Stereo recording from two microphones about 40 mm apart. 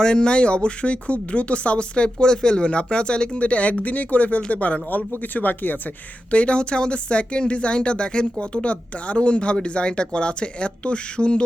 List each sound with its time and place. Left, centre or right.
0.0 s speech: left
6.3 s speech: left